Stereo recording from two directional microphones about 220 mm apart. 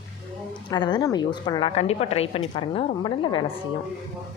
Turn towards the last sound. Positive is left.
turn(degrees=25)  # may be behind; listen again after turning